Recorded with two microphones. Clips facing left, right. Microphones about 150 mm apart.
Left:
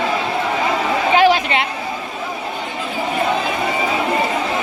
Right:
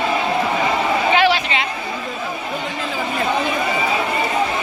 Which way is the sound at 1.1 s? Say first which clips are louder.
Left 6 dB; 45° left (ahead or behind).